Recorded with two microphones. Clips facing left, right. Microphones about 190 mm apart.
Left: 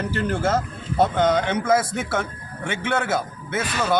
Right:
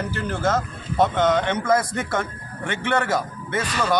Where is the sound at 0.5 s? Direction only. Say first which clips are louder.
Left 1 dB; 10° left (ahead or behind).